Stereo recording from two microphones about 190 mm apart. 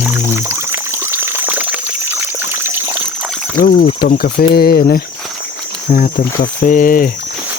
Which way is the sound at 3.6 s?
50° left (ahead or behind).